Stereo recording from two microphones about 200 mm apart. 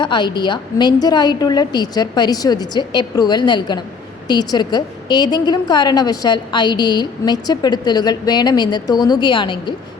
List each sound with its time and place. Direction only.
0.0 s a woman's voice: 20° left (ahead or behind)